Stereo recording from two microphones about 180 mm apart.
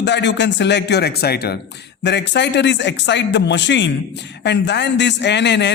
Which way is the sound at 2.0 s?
75° left (ahead or behind).